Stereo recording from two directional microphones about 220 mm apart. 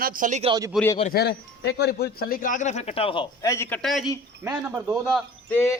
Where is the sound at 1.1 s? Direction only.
50° left (ahead or behind); by 5.6 s centre (ahead or behind).